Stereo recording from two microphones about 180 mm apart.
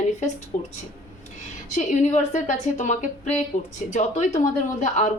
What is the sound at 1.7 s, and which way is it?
A woman's voice, 40° left (ahead or behind).